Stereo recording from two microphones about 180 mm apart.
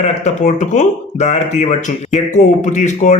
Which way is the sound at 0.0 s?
40° left (ahead or behind).